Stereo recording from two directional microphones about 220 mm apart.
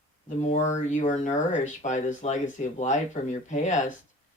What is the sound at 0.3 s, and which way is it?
Speech, 30° left (ahead or behind).